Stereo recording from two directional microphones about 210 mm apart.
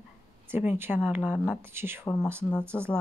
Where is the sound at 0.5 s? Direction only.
10° right (ahead or behind).